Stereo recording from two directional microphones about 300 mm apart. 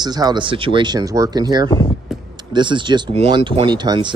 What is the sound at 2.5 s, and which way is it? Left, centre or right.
Speech, centre.